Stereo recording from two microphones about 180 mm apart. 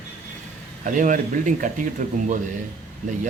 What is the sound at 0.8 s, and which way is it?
Speech, 45° right (ahead or behind).